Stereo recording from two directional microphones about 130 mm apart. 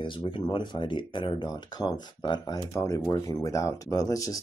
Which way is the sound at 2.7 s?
25° left (ahead or behind).